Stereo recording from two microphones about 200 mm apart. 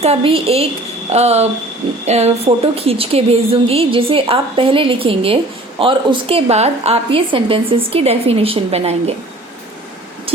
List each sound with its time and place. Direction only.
0.0 s a woman's voice: 30° right (ahead or behind)